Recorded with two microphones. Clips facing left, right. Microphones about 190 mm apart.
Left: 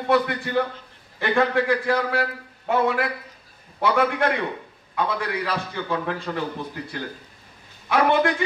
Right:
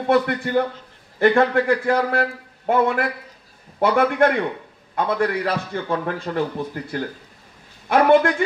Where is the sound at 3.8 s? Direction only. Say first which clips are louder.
Right 4 dB; 50° right (ahead or behind).